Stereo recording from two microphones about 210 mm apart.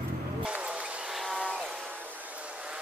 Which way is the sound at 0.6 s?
5° right (ahead or behind).